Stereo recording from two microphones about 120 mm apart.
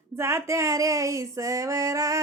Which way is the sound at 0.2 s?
20° right (ahead or behind).